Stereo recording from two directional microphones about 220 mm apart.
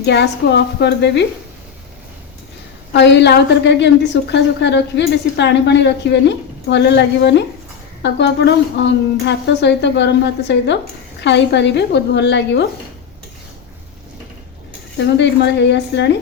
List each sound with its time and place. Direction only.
0.0 s a woman's voice: 50° left (ahead or behind)
2.9 s a woman's voice: 50° left (ahead or behind)
14.9 s a woman's voice: 50° left (ahead or behind)